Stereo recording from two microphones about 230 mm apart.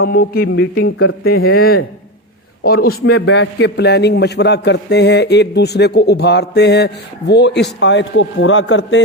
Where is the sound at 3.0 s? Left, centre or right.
Left.